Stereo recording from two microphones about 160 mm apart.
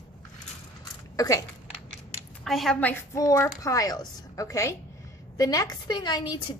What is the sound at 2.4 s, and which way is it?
Speech, centre (ahead or behind).